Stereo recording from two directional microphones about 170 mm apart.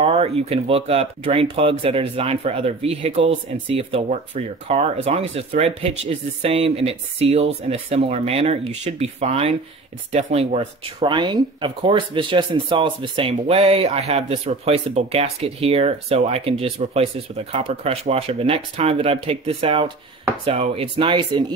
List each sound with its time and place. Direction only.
0.0 s speech: 35° right (ahead or behind)
11.0 s speech: 25° right (ahead or behind)